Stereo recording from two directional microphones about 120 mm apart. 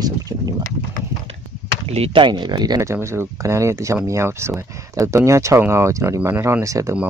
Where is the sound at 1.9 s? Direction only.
55° right (ahead or behind).